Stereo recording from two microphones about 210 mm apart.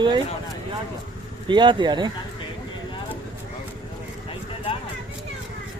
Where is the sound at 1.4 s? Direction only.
20° right (ahead or behind).